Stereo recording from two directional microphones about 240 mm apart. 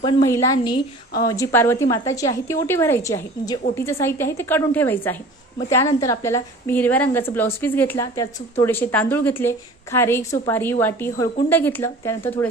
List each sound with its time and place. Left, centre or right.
0.0 s a woman's voice: centre